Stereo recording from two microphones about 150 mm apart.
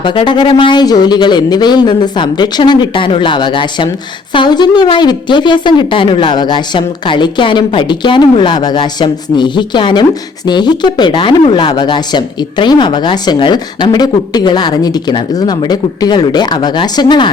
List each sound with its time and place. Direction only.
0.0 s a woman's voice: 35° left (ahead or behind)